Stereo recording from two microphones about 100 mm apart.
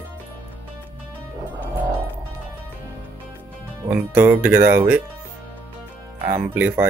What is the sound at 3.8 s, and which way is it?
Speech, 20° right (ahead or behind).